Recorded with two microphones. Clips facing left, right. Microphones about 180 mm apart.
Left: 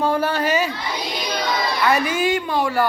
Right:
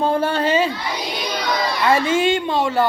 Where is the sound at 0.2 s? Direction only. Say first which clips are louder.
Right 2 dB; 25° right (ahead or behind).